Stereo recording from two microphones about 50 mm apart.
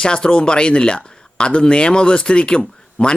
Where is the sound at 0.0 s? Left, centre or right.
Centre.